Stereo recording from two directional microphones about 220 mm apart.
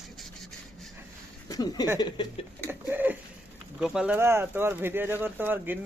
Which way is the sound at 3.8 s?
5° right (ahead or behind).